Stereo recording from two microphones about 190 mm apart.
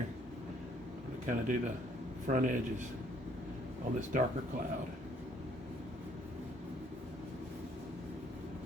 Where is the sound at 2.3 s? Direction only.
40° right (ahead or behind).